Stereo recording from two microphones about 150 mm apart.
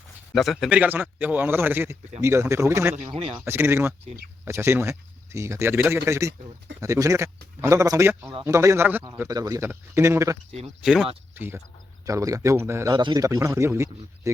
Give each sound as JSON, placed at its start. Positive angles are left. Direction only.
{"t": 0.3, "sound": "speech", "side_deg": 0}
{"t": 3.2, "sound": "speech", "side_deg": -35}
{"t": 3.4, "sound": "speech", "side_deg": -15}
{"t": 10.8, "sound": "speech", "side_deg": -5}
{"t": 11.3, "sound": "speech", "side_deg": -15}